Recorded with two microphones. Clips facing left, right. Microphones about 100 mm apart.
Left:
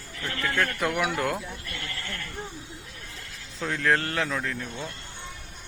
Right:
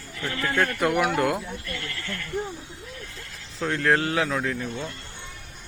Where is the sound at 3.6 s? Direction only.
Centre (ahead or behind).